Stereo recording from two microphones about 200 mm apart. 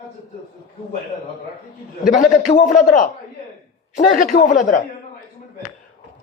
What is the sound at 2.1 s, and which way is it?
A man's voice, 40° left (ahead or behind).